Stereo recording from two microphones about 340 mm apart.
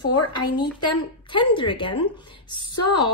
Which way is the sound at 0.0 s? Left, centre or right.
Left.